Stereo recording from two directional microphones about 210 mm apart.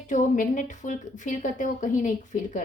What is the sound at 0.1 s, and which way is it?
A woman's voice, 35° left (ahead or behind).